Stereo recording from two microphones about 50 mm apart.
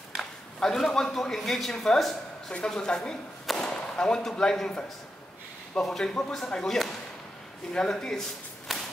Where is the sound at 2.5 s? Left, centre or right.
Centre.